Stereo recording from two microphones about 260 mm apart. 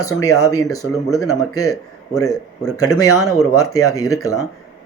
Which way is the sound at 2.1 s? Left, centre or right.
Centre.